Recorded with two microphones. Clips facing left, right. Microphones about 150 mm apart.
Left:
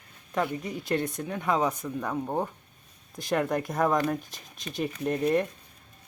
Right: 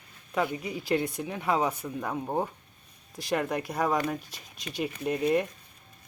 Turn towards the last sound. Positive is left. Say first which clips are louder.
# left 1 dB
turn(degrees=-5)  # may be behind; listen again after turning